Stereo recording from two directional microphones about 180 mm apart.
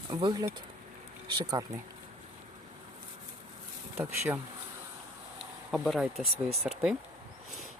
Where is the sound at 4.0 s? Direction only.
10° right (ahead or behind).